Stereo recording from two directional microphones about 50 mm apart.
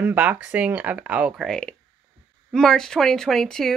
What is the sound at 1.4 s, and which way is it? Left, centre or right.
Speech, centre.